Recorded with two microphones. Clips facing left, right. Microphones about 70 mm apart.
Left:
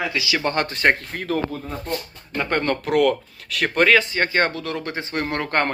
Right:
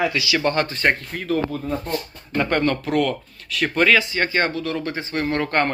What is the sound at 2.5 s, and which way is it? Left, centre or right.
Speech, left.